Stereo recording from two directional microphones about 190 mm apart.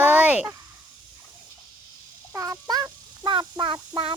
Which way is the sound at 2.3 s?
15° right (ahead or behind).